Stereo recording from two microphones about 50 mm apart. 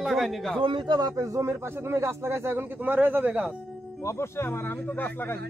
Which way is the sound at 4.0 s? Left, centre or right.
Left.